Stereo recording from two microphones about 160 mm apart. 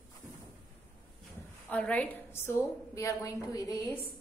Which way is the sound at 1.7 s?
10° left (ahead or behind).